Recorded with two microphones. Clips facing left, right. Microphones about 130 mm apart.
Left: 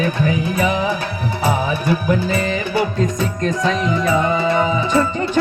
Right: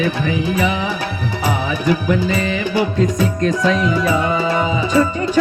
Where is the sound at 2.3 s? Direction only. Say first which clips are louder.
Right 1 dB; 40° left (ahead or behind).